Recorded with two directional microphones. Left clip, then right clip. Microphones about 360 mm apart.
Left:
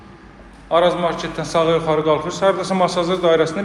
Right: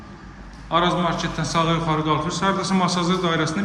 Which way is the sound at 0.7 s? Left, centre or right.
Centre.